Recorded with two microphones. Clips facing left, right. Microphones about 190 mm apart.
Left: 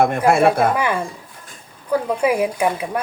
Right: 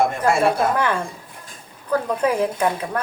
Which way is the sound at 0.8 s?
10° left (ahead or behind).